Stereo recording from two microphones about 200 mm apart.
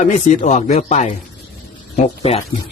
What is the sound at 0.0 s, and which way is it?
A man's voice, 35° left (ahead or behind).